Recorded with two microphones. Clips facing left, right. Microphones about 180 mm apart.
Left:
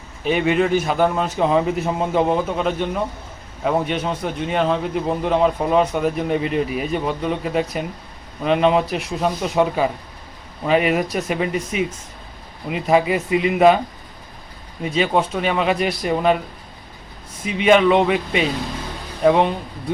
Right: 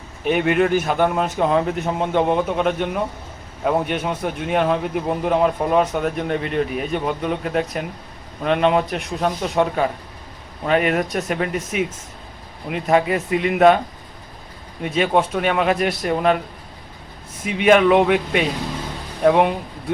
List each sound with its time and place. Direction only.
0.3 s a man's voice: centre (ahead or behind)
14.8 s a man's voice: centre (ahead or behind)
17.4 s a man's voice: 5° right (ahead or behind)